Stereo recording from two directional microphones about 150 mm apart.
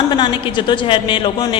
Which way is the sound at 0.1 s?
35° left (ahead or behind).